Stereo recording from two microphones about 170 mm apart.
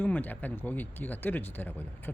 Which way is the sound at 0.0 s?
10° left (ahead or behind).